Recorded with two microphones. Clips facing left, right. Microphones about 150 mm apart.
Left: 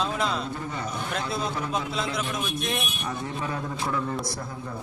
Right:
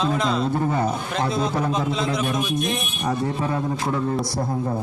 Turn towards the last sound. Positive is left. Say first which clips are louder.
# right 5 dB
turn(degrees=-35)  # may be behind; listen again after turning